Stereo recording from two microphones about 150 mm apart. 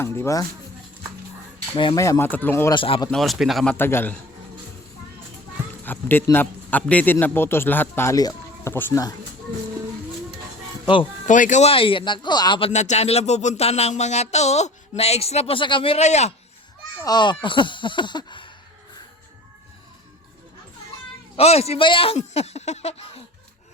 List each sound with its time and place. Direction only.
0.2 s speech: 20° left (ahead or behind)
1.7 s speech: 35° left (ahead or behind)
2.0 s a man's voice: 20° left (ahead or behind)
2.7 s speech: 35° left (ahead or behind)
3.1 s speech: centre (ahead or behind)
3.8 s a man's voice: 15° left (ahead or behind)
5.8 s a man's voice: 15° left (ahead or behind)
11.3 s speech: 55° left (ahead or behind)
11.7 s speech: 35° left (ahead or behind)
17.0 s speech: 30° left (ahead or behind)
21.3 s speech: 45° left (ahead or behind)